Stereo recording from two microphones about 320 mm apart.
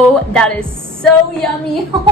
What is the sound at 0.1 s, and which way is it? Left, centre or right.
Speech, centre.